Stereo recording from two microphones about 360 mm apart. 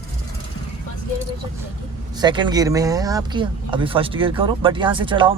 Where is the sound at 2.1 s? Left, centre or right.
Centre.